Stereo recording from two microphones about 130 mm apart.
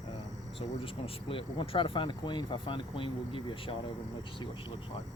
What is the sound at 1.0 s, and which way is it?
Speech, 45° left (ahead or behind).